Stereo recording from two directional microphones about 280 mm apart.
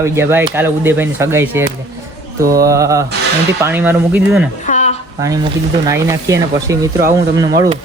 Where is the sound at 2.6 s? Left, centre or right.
Centre.